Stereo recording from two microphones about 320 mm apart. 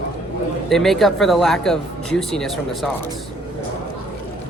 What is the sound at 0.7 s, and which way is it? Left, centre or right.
Speech, centre.